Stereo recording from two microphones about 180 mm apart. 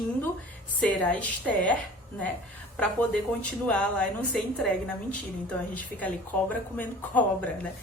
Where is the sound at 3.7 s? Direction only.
5° left (ahead or behind).